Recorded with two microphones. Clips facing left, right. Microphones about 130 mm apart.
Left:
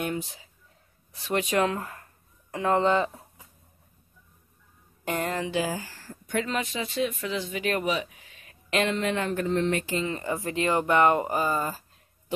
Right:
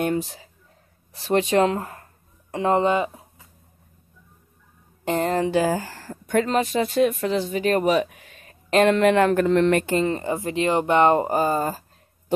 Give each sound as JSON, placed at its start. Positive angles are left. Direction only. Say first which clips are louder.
{"t": 0.0, "sound": "speech", "louder": "right 7 dB", "side_deg": -40}
{"t": 5.0, "sound": "speech", "louder": "right 7 dB", "side_deg": -30}
{"t": 5.7, "sound": "speech", "louder": "right 8 dB", "side_deg": -60}
{"t": 8.4, "sound": "a sound", "louder": "right 8 dB", "side_deg": -40}
{"t": 8.8, "sound": "speech", "louder": "right 12 dB", "side_deg": -65}
{"t": 10.1, "sound": "speech", "louder": "right 4 dB", "side_deg": -25}